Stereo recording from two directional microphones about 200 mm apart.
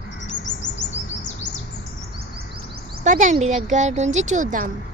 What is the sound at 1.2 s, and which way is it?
Bird, 35° left (ahead or behind).